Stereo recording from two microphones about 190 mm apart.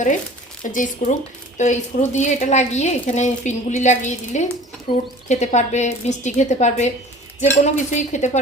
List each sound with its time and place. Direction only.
0.7 s a woman's voice: 40° left (ahead or behind)